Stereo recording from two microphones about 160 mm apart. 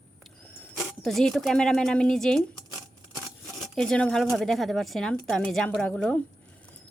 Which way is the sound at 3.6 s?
5° left (ahead or behind).